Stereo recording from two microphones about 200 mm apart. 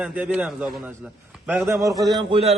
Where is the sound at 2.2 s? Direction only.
25° right (ahead or behind).